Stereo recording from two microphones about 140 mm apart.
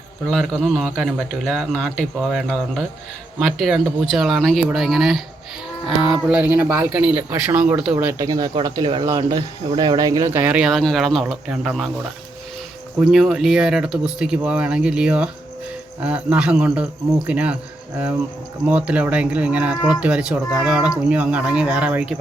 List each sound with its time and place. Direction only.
0.3 s speech: centre (ahead or behind)
6.2 s a man's voice: 10° right (ahead or behind)
7.9 s speech: 20° right (ahead or behind)
10.3 s speech: 10° right (ahead or behind)
13.0 s a man's voice: centre (ahead or behind)